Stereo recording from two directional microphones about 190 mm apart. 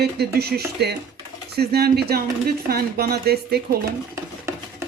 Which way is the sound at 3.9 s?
15° right (ahead or behind).